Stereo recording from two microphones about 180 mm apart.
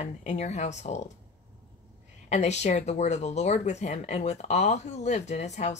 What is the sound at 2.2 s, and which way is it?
Speech, 40° left (ahead or behind).